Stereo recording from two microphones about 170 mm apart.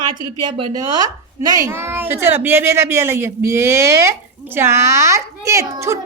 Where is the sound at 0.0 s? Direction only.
25° right (ahead or behind).